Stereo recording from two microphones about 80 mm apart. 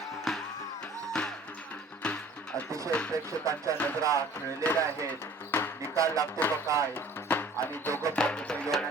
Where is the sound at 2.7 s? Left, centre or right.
Right.